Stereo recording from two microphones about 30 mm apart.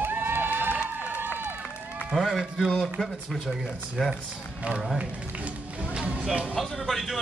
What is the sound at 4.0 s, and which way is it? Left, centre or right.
Speech, centre.